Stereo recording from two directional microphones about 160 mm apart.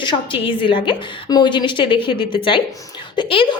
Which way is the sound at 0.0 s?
30° left (ahead or behind).